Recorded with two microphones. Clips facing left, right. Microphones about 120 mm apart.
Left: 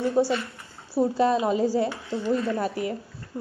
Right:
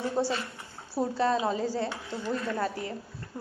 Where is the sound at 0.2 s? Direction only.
25° right (ahead or behind).